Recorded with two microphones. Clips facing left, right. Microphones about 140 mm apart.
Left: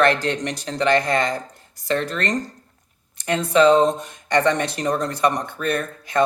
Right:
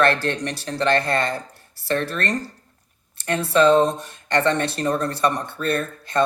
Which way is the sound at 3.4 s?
15° left (ahead or behind).